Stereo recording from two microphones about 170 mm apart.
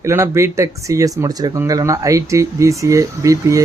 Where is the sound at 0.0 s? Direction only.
15° right (ahead or behind).